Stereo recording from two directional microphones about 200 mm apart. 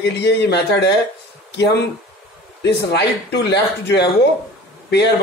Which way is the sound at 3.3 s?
60° left (ahead or behind).